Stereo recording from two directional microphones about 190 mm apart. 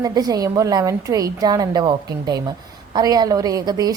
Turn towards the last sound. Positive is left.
turn(degrees=-20)  # may be behind; listen again after turning